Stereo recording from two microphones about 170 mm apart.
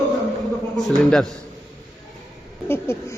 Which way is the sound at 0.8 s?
Centre (ahead or behind).